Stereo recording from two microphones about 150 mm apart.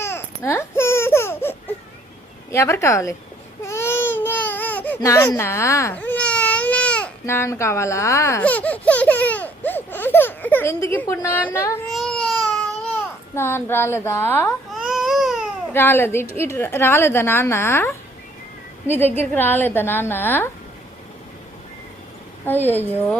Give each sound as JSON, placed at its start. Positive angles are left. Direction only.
{"t": 0.0, "sound": "baby cry", "side_deg": 15}
{"t": 2.5, "sound": "a woman's voice", "side_deg": 20}
{"t": 3.6, "sound": "baby cry", "side_deg": 15}
{"t": 4.9, "sound": "baby cry", "side_deg": 25}
{"t": 10.9, "sound": "a woman's voice", "side_deg": 15}
{"t": 11.9, "sound": "babbling", "side_deg": 5}
{"t": 13.3, "sound": "a woman's voice", "side_deg": 15}
{"t": 14.7, "sound": "baby cry", "side_deg": 0}
{"t": 15.7, "sound": "a woman's voice", "side_deg": 15}
{"t": 22.4, "sound": "a woman's voice", "side_deg": 15}